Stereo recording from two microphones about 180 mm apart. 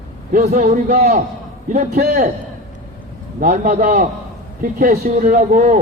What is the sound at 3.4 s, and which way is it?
A man's voice, 50° right (ahead or behind).